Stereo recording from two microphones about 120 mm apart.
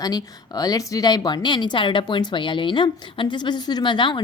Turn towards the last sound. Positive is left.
turn(degrees=40)  # may be behind; listen again after turning